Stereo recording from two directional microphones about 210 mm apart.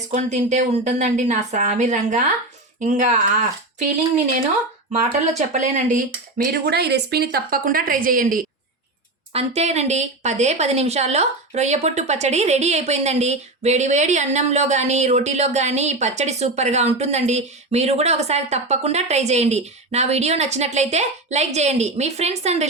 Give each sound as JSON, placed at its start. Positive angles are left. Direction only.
{"t": 0.1, "sound": "a woman's voice", "side_deg": -35}
{"t": 4.9, "sound": "speech", "side_deg": -30}
{"t": 9.3, "sound": "a woman's voice", "side_deg": -30}